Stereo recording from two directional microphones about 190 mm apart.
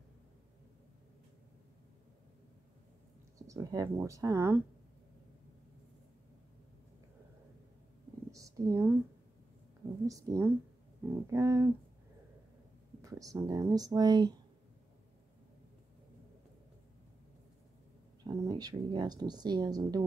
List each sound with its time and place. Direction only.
3.3 s speech: 15° right (ahead or behind)
8.3 s a sound: 15° right (ahead or behind)
10.0 s speech: 15° right (ahead or behind)
13.0 s speech: 15° right (ahead or behind)
18.2 s speech: 20° right (ahead or behind)